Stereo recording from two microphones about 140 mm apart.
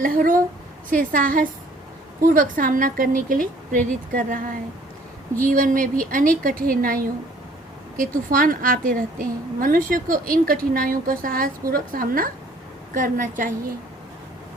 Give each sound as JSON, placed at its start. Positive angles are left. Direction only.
{"t": 0.0, "sound": "a sound", "side_deg": -80}
{"t": 0.9, "sound": "a woman's voice", "side_deg": -75}
{"t": 8.3, "sound": "a woman's voice", "side_deg": -85}
{"t": 12.9, "sound": "a woman's voice", "side_deg": -75}